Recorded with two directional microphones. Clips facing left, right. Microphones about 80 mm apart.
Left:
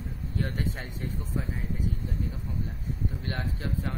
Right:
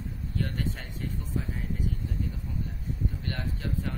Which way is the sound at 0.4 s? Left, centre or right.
Centre.